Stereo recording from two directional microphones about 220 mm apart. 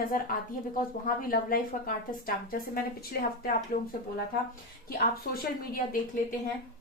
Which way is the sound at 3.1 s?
45° left (ahead or behind).